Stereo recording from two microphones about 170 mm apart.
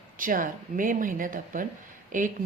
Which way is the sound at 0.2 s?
55° right (ahead or behind).